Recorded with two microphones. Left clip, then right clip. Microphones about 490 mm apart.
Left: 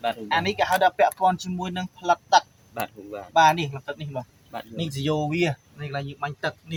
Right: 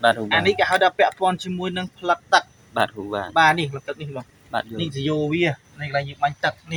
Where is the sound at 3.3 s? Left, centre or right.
Left.